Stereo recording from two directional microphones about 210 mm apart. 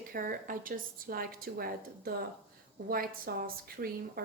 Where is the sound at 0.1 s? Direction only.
40° right (ahead or behind).